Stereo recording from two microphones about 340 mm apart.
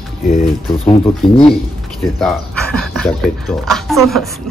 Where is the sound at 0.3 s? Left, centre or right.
Centre.